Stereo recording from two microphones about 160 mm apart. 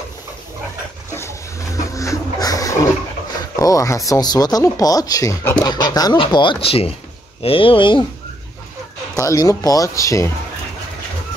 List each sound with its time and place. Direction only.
1.1 s a sound: 20° left (ahead or behind)
3.5 s speech: 20° left (ahead or behind)
9.2 s speech: 20° left (ahead or behind)